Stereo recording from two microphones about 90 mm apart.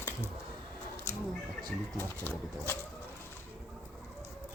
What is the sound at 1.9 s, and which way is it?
Speech, 25° left (ahead or behind).